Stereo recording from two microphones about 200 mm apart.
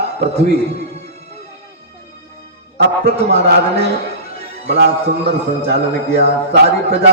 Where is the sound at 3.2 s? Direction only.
55° right (ahead or behind).